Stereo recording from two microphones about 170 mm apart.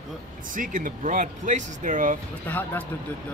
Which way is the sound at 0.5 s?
50° right (ahead or behind).